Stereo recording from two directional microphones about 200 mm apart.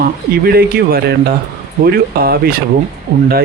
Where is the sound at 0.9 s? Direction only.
50° right (ahead or behind).